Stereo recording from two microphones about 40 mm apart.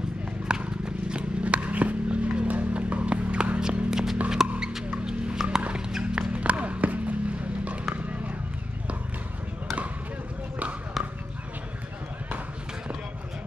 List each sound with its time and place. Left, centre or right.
0.5 s horse: right
1.4 s a sound: right; by 4.2 s centre
4.3 s music: centre; by 7.8 s right
11.0 s basketball bounce: centre